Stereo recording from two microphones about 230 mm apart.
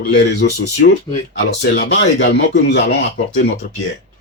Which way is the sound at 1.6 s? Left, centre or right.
Left.